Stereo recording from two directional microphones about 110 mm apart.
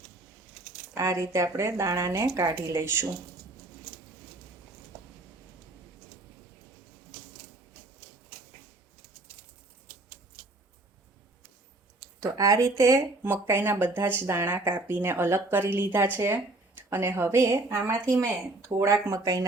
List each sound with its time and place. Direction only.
0.9 s speech: 30° right (ahead or behind)
12.2 s speech: 30° right (ahead or behind)